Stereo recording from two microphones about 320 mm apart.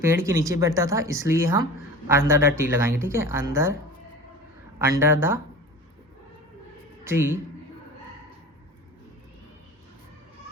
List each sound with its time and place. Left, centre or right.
0.0 s a woman's voice: centre
4.8 s a woman's voice: centre
7.0 s a woman's voice: centre